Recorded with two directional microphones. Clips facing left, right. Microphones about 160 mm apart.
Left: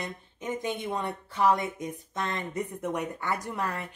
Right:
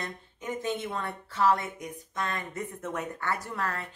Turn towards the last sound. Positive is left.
turn(degrees=15)  # may be behind; listen again after turning